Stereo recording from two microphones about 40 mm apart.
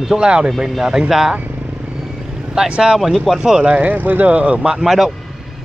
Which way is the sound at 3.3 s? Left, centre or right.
Centre.